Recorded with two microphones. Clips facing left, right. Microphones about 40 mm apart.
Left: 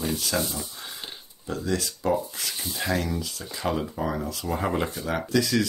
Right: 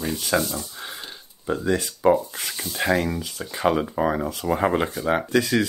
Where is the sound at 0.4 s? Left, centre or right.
Centre.